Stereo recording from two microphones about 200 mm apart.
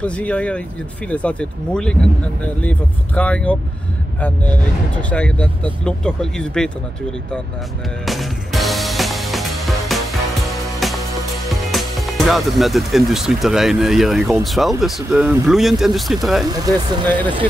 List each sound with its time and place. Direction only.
0.0 s speech: 5° left (ahead or behind)
5.1 s speech: 5° left (ahead or behind)
8.0 s music: centre (ahead or behind)
14.4 s speech: centre (ahead or behind)
16.4 s speech: 20° right (ahead or behind)